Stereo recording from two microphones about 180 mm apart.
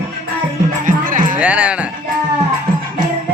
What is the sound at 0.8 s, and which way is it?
Music, 45° right (ahead or behind).